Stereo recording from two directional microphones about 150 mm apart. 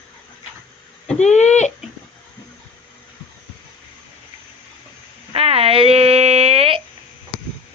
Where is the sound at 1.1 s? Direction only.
50° left (ahead or behind).